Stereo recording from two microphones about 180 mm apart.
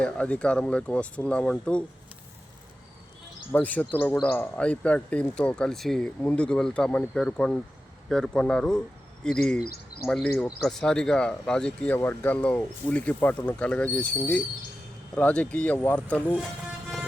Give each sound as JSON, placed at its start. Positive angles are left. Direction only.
{"t": 0.0, "sound": "speech", "side_deg": 5}
{"t": 3.5, "sound": "speech", "side_deg": 10}
{"t": 9.6, "sound": "speech", "side_deg": 55}
{"t": 10.1, "sound": "speech", "side_deg": 5}